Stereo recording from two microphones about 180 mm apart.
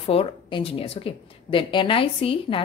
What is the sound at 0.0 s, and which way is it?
A woman's voice, 30° left (ahead or behind).